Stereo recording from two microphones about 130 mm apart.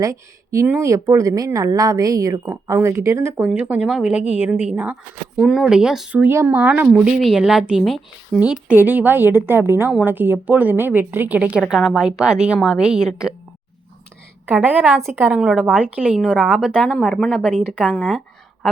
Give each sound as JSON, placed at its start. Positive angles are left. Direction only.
{"t": 0.0, "sound": "a woman's voice", "side_deg": -25}
{"t": 6.1, "sound": "a woman's voice", "side_deg": -20}
{"t": 8.4, "sound": "a woman's voice", "side_deg": -10}
{"t": 14.4, "sound": "a woman's voice", "side_deg": -15}
{"t": 17.6, "sound": "a woman's voice", "side_deg": -10}
{"t": 17.9, "sound": "a woman's voice", "side_deg": 5}